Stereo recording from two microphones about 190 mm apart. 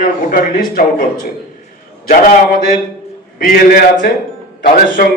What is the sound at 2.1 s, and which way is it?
A man's voice, 45° left (ahead or behind).